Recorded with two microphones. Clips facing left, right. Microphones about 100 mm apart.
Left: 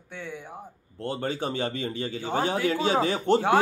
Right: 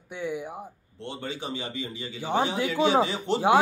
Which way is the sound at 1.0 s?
45° left (ahead or behind).